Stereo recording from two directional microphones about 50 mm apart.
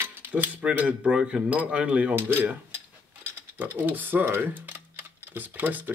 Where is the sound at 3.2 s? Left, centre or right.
Right.